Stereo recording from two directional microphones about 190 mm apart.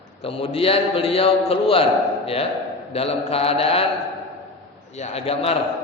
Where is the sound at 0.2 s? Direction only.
30° left (ahead or behind).